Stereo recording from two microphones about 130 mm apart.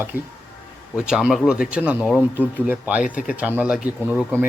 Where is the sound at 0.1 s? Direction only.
15° right (ahead or behind).